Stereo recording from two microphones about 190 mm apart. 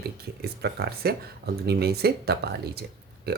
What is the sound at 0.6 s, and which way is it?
Speech, 55° right (ahead or behind).